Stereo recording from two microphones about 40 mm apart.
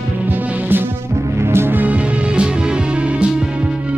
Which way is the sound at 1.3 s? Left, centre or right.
Right.